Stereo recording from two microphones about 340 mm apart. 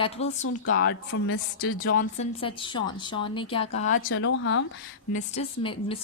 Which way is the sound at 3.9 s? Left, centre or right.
Left.